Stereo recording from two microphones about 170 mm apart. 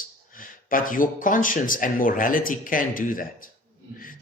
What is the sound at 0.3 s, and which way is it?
A man's voice, 55° left (ahead or behind).